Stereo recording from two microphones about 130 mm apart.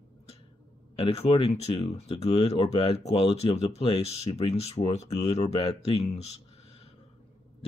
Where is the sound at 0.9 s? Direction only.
45° left (ahead or behind).